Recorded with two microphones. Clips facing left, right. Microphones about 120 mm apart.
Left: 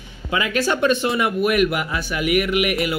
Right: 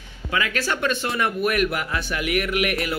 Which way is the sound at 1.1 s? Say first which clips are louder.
Left 4 dB; 5° left (ahead or behind).